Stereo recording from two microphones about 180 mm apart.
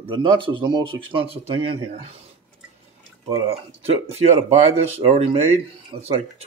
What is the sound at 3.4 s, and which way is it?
Speech, 35° right (ahead or behind).